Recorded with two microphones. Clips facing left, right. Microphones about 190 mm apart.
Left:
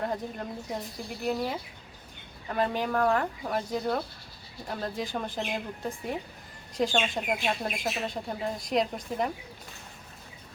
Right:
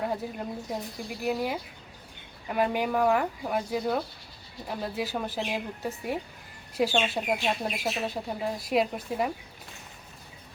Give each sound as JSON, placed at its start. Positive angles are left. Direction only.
{"t": 0.0, "sound": "speech", "side_deg": -5}